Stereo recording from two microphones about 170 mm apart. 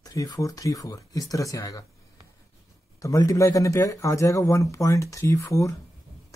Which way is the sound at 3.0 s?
20° left (ahead or behind).